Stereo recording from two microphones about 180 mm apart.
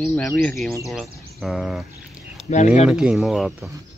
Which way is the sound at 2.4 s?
40° left (ahead or behind).